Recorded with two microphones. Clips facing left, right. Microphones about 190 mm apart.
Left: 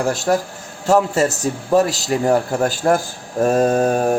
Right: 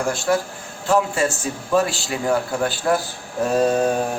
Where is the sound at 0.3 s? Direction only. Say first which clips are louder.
Left 2 dB; 40° left (ahead or behind).